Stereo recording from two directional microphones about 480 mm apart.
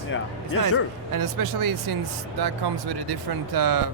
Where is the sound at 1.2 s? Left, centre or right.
Right.